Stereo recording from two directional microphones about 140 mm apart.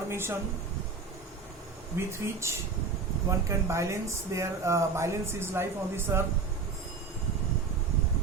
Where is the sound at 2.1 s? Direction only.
20° right (ahead or behind).